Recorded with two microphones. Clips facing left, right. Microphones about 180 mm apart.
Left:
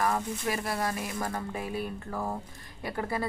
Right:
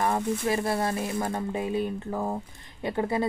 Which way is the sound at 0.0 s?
25° right (ahead or behind).